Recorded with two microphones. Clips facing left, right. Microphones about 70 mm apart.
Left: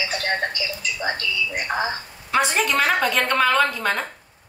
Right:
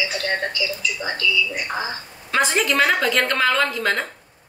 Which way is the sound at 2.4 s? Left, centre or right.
Centre.